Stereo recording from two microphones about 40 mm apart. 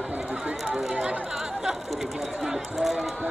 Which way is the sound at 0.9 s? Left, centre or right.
Right.